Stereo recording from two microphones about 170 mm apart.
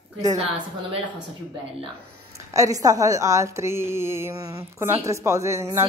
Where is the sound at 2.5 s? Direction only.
20° right (ahead or behind).